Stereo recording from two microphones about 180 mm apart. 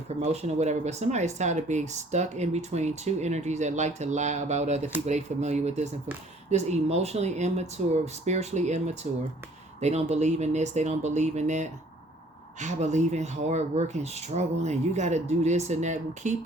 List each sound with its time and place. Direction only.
0.2 s speech: 40° right (ahead or behind)